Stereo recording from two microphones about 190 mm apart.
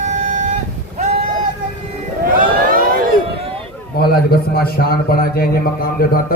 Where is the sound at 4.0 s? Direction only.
55° left (ahead or behind).